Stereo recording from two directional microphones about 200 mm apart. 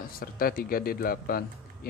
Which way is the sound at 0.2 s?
45° left (ahead or behind).